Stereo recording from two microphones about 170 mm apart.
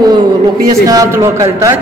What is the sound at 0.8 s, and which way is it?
Speech, 20° right (ahead or behind).